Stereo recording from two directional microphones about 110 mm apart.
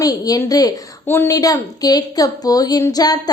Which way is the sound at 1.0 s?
20° left (ahead or behind).